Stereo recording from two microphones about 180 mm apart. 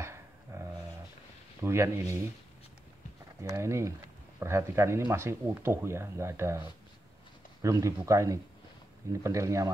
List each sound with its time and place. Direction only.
0.0 s a sound: 15° right (ahead or behind)
1.6 s speech: 15° right (ahead or behind)
3.3 s speech: 15° right (ahead or behind)
7.6 s speech: 15° right (ahead or behind)